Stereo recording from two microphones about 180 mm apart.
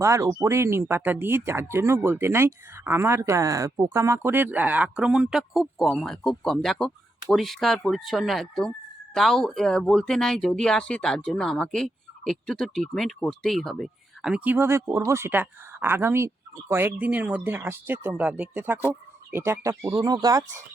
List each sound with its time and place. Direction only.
0.0 s speech: 15° right (ahead or behind)